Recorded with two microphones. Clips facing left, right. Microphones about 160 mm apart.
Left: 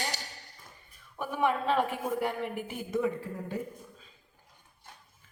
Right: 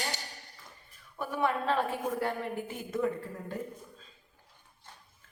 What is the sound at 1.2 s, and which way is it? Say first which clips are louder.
A woman's voice: left 1 dB; 15° left (ahead or behind).